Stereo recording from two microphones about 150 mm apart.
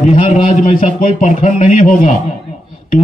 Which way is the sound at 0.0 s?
50° left (ahead or behind).